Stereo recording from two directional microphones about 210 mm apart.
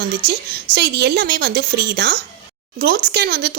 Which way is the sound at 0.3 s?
50° right (ahead or behind).